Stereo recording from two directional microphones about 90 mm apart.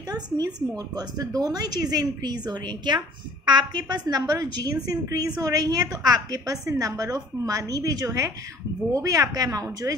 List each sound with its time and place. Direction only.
0.9 s a woman's voice: 45° right (ahead or behind)